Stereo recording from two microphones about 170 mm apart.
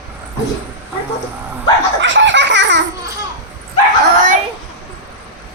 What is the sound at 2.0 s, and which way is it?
Belly laugh, 90° right.